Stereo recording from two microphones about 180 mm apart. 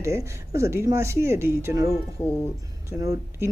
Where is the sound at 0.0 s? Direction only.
15° right (ahead or behind).